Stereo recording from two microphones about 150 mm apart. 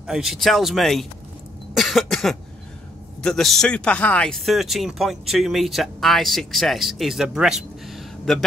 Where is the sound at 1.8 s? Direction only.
Centre (ahead or behind).